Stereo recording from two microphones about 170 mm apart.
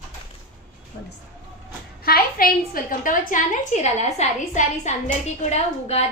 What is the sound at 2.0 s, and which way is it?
A woman's voice, 60° left (ahead or behind).